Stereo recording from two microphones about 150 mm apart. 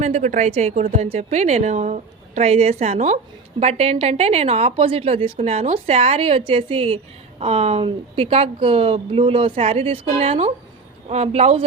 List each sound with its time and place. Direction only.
0.0 s a woman's voice: 50° right (ahead or behind)